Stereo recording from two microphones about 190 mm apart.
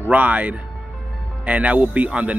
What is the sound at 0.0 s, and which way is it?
Speech, 10° right (ahead or behind).